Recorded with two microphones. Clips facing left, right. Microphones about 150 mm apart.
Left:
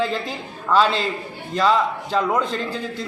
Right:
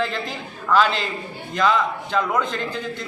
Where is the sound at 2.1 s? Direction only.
35° left (ahead or behind).